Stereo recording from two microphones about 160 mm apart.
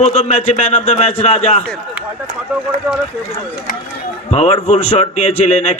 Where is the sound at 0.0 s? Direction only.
40° left (ahead or behind).